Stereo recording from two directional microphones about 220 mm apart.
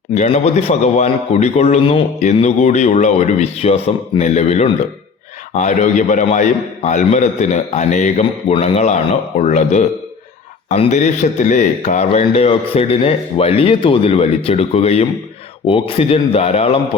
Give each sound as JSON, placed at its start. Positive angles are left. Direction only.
{"t": 0.1, "sound": "a man's voice", "side_deg": 30}